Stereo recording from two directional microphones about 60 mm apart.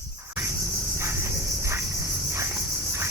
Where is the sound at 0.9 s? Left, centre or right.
Right.